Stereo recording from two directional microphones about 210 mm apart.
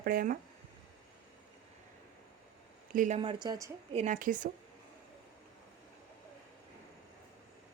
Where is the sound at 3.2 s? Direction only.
20° right (ahead or behind).